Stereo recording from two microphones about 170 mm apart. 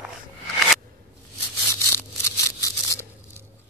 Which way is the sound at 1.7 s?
15° left (ahead or behind).